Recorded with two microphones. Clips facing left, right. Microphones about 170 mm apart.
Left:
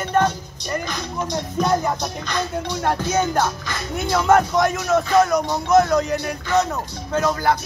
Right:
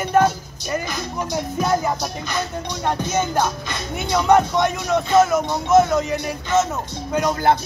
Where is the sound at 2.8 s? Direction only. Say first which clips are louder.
Left 1 dB; centre (ahead or behind).